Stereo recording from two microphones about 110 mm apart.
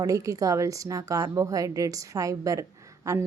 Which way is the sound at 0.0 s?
35° right (ahead or behind).